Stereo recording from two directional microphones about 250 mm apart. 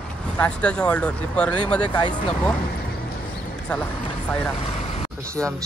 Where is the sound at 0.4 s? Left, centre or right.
Centre.